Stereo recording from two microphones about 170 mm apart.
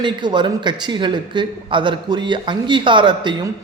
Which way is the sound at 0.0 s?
25° right (ahead or behind).